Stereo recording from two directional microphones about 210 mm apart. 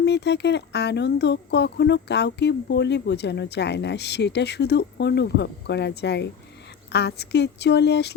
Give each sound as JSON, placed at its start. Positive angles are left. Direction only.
{"t": 0.0, "sound": "speech", "side_deg": 55}